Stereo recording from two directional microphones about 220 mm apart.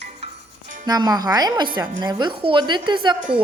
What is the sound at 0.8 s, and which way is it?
A woman's voice, 20° right (ahead or behind).